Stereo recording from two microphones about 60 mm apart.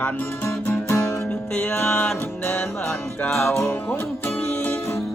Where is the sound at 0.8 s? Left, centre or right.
Left.